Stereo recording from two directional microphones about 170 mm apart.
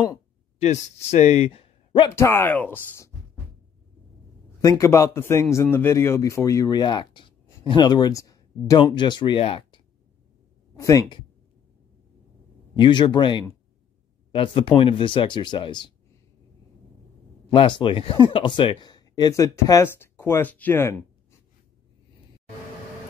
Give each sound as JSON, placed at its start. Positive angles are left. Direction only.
{"t": 0.6, "sound": "speech", "side_deg": 40}
{"t": 2.0, "sound": "a man's voice", "side_deg": 15}
{"t": 4.6, "sound": "a man's voice", "side_deg": 20}
{"t": 10.8, "sound": "speech", "side_deg": 20}
{"t": 12.7, "sound": "speech", "side_deg": 25}
{"t": 17.5, "sound": "speech", "side_deg": 30}